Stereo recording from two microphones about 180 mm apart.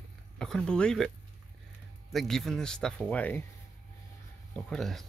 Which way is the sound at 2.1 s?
Centre (ahead or behind).